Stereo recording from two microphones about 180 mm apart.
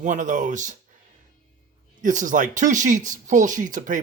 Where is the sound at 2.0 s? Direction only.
45° right (ahead or behind).